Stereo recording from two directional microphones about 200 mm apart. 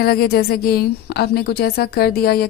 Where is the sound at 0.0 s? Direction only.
50° left (ahead or behind).